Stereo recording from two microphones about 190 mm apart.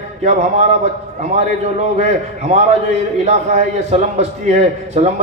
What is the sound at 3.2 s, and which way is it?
A man's voice, 35° right (ahead or behind).